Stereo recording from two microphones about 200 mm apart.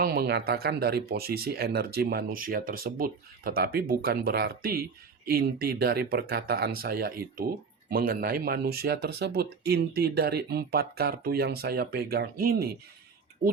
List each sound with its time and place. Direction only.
0.0 s speech: 50° right (ahead or behind)